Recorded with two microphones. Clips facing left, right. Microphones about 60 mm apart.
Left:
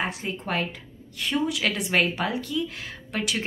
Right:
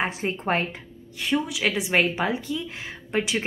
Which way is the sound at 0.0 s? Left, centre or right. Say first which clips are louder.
Right 3 dB; right.